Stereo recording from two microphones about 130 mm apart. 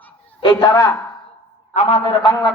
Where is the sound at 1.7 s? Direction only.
65° left (ahead or behind).